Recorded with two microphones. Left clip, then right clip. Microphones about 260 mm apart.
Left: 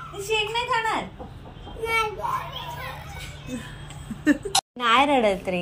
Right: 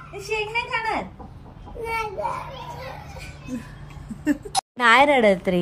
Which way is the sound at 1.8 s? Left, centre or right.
Left.